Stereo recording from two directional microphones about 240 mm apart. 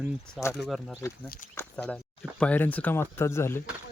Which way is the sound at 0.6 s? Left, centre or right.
Centre.